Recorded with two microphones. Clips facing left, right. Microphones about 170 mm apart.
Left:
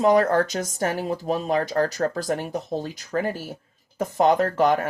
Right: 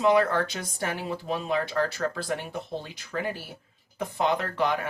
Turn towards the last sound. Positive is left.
turn(degrees=45)  # may be behind; listen again after turning